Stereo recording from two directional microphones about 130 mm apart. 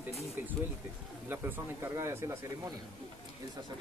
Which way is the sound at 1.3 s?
15° right (ahead or behind).